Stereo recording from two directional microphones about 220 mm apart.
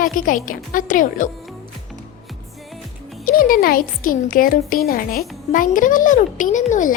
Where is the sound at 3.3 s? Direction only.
40° left (ahead or behind).